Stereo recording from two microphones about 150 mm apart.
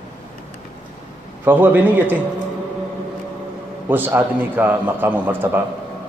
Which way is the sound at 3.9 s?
15° right (ahead or behind).